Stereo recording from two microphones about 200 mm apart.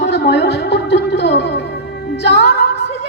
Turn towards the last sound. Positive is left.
turn(degrees=55)  # may be behind; listen again after turning